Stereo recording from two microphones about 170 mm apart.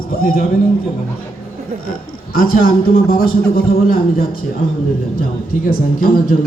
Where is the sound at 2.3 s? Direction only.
55° left (ahead or behind).